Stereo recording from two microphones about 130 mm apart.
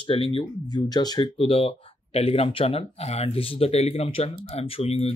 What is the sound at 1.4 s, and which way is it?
Speech, 45° left (ahead or behind).